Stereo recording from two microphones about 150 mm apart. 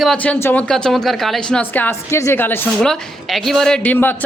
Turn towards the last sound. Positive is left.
turn(degrees=10)  # may be behind; listen again after turning